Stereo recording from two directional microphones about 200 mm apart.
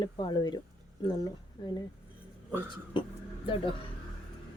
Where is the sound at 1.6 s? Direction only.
20° left (ahead or behind).